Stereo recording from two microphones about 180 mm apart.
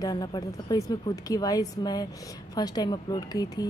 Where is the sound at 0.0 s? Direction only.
20° left (ahead or behind).